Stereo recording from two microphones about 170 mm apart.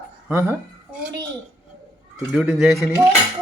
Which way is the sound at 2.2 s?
5° right (ahead or behind).